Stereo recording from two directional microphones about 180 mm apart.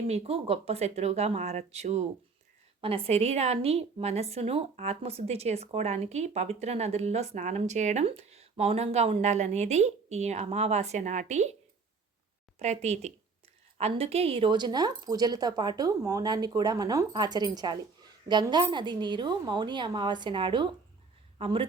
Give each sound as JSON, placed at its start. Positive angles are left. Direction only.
{"t": 0.1, "sound": "a woman's voice", "side_deg": -35}
{"t": 12.5, "sound": "a woman's voice", "side_deg": -40}